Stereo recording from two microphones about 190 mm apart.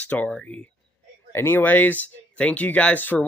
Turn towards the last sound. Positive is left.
turn(degrees=10)  # may be behind; listen again after turning